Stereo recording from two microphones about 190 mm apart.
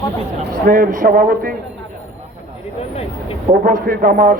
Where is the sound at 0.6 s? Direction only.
45° right (ahead or behind).